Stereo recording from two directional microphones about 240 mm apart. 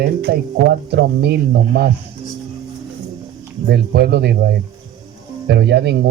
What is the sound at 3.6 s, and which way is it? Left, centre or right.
Speech, right.